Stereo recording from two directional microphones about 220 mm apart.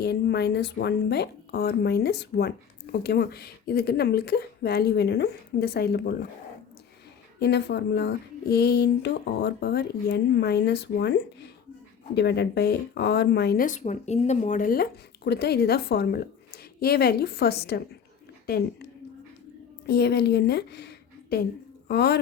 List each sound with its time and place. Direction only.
0.0 s speech: 50° left (ahead or behind)
7.3 s speech: 50° left (ahead or behind)
19.9 s a woman's voice: 50° left (ahead or behind)